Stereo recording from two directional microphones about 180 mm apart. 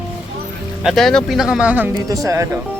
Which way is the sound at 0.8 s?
Centre (ahead or behind).